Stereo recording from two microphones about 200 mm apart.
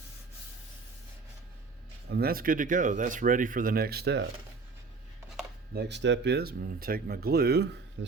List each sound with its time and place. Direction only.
2.0 s speech: 50° right (ahead or behind)
5.7 s speech: 60° right (ahead or behind)